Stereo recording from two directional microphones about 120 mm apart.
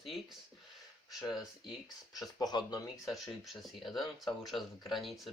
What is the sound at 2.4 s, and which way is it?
Speech, 35° left (ahead or behind).